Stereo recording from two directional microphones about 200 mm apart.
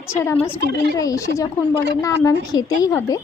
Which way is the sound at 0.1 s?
15° left (ahead or behind).